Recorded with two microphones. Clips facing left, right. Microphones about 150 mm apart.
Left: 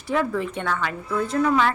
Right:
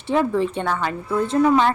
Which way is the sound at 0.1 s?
25° right (ahead or behind).